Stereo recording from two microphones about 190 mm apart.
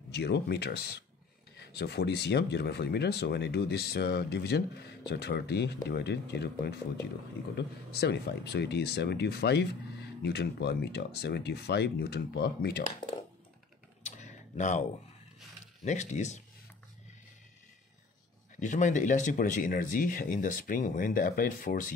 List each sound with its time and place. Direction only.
0.1 s speech: 60° left (ahead or behind)
14.0 s typing: 40° left (ahead or behind)
15.8 s speech: 40° left (ahead or behind)
18.6 s speech: 40° left (ahead or behind)